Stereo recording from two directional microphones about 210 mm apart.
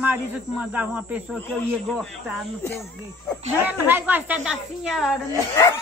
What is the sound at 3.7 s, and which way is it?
Speech, 10° right (ahead or behind).